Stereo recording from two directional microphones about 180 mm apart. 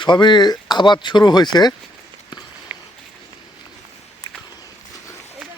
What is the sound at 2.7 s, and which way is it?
Run, 10° right (ahead or behind).